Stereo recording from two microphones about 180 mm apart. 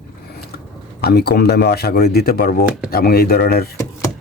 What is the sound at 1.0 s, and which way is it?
Speech, 60° left (ahead or behind).